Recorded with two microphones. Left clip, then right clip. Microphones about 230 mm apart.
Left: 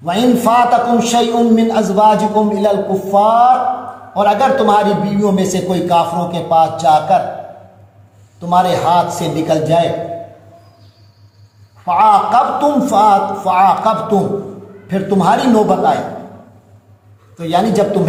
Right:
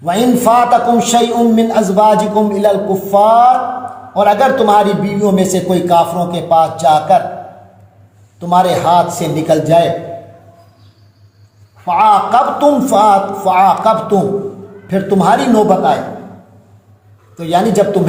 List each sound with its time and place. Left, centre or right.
0.0 s a man's voice: right
8.4 s a man's voice: right
11.9 s a man's voice: right
17.3 s speech: right